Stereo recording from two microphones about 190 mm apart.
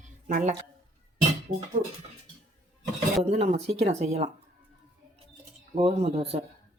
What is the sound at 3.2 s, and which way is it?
Speech, 35° right (ahead or behind).